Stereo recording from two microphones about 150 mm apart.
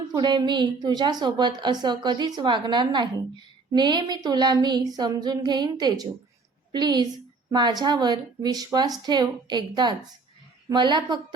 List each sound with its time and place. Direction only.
0.1 s a woman's voice: 30° right (ahead or behind)